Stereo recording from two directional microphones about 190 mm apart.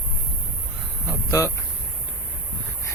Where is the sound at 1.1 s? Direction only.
15° left (ahead or behind).